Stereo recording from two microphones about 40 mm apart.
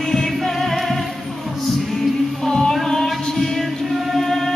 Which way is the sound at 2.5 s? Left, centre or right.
Centre.